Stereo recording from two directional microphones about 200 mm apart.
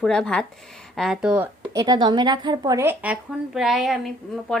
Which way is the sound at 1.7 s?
20° right (ahead or behind).